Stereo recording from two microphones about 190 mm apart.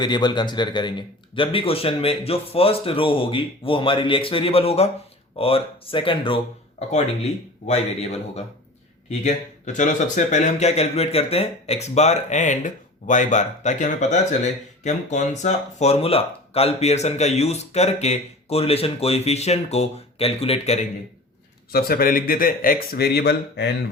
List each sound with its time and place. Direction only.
0.0 s a man's voice: 20° left (ahead or behind)
21.7 s speech: 55° left (ahead or behind)